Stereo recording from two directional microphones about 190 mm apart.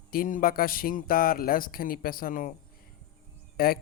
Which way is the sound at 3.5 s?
50° left (ahead or behind).